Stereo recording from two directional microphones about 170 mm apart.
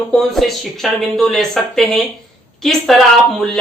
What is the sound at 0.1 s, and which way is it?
Speech, centre (ahead or behind).